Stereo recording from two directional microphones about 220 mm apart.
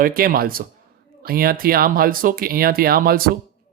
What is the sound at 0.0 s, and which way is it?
Speech, 40° right (ahead or behind).